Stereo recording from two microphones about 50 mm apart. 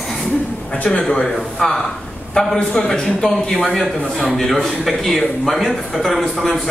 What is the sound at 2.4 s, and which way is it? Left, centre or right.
Speech, left.